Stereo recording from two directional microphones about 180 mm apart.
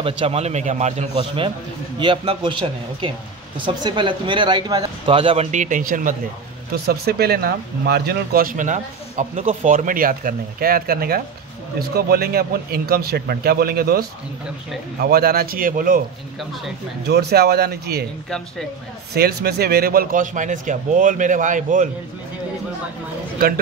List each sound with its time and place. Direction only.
0.2 s a man's voice: 35° right (ahead or behind)
1.1 s speech: 30° right (ahead or behind); by 6.1 s 45° right (ahead or behind)
6.7 s speech: 60° right (ahead or behind)
17.1 s speech: 65° right (ahead or behind)
19.1 s a man's voice: 60° right (ahead or behind); by 21.8 s 45° right (ahead or behind)